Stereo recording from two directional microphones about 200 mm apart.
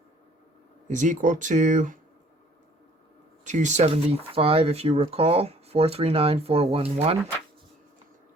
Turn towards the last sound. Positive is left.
turn(degrees=-30)  # may be behind; listen again after turning